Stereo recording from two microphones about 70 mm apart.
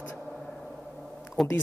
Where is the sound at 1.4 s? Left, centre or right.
Centre.